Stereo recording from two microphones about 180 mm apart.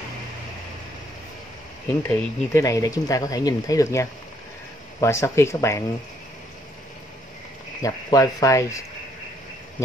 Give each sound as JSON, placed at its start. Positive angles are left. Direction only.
{"t": 2.0, "sound": "speech", "side_deg": 15}
{"t": 7.8, "sound": "speech", "side_deg": 20}